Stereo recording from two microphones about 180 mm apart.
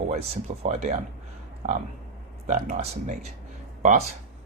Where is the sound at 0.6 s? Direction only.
40° right (ahead or behind).